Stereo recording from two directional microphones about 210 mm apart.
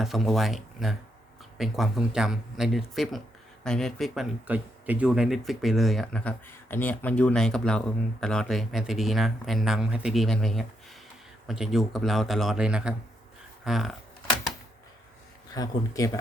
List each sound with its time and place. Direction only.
0.0 s speech: centre (ahead or behind)
15.5 s speech: 15° left (ahead or behind)